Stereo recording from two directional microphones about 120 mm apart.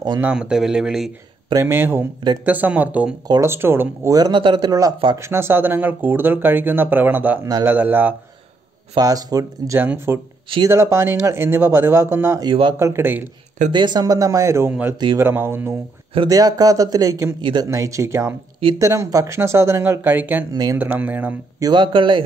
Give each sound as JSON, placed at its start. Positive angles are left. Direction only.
{"t": 0.2, "sound": "speech", "side_deg": -10}
{"t": 1.5, "sound": "speech", "side_deg": -20}
{"t": 3.3, "sound": "speech", "side_deg": -25}
{"t": 4.1, "sound": "speech", "side_deg": -35}
{"t": 8.9, "sound": "speech", "side_deg": -30}
{"t": 9.8, "sound": "speech", "side_deg": -20}
{"t": 12.4, "sound": "speech", "side_deg": -40}
{"t": 12.7, "sound": "speech", "side_deg": -20}
{"t": 13.7, "sound": "speech", "side_deg": -40}
{"t": 16.3, "sound": "speech", "side_deg": -30}
{"t": 17.4, "sound": "speech", "side_deg": -40}
{"t": 17.6, "sound": "speech", "side_deg": -25}
{"t": 21.5, "sound": "speech", "side_deg": -35}